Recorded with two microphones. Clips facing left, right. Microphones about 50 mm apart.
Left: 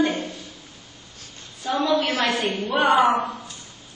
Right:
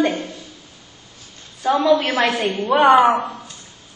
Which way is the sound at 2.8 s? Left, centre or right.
Right.